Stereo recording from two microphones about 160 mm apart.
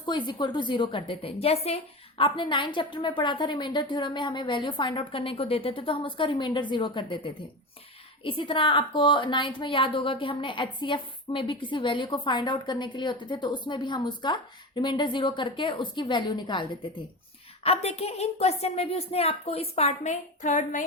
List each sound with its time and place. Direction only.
0.0 s a woman's voice: 30° left (ahead or behind)
17.6 s a woman's voice: 40° left (ahead or behind)